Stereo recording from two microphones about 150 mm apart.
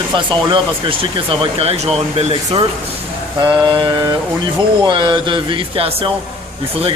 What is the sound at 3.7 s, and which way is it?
Speech, 30° right (ahead or behind).